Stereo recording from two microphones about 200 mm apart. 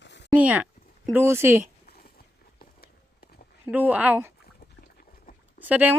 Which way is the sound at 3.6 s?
10° right (ahead or behind).